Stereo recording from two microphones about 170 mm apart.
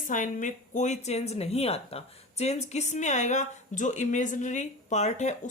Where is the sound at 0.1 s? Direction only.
50° left (ahead or behind).